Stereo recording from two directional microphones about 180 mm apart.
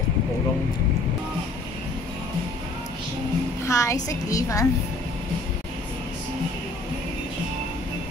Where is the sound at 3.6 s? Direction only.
20° left (ahead or behind).